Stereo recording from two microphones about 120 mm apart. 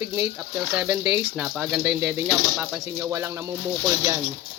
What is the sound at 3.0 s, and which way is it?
Speech, 20° right (ahead or behind).